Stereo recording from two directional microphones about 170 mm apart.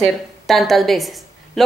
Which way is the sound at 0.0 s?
Centre (ahead or behind).